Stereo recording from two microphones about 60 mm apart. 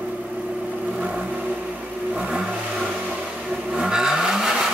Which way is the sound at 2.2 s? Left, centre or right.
Centre.